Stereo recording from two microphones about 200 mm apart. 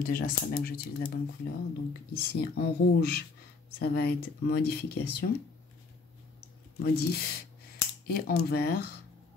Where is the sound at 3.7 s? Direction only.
55° left (ahead or behind).